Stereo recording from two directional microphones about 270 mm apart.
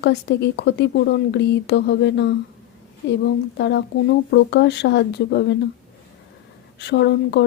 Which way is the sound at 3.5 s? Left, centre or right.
Left.